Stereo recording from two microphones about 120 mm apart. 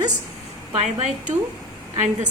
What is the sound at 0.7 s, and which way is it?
Speech, 60° right (ahead or behind).